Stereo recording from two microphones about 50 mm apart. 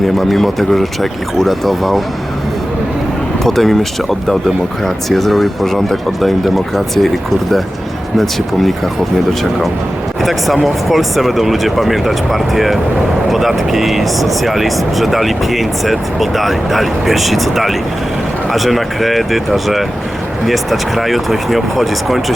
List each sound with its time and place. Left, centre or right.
0.2 s speech: centre
3.4 s speech: centre
10.2 s speech: centre